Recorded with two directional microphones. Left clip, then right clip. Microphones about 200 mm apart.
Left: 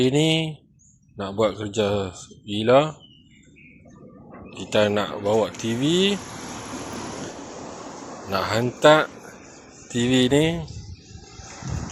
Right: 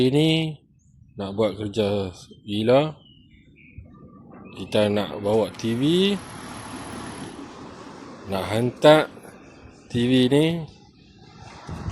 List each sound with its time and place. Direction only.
0.0 s speech: 25° right (ahead or behind)
4.4 s speech: 25° right (ahead or behind)
8.3 s speech: 20° right (ahead or behind)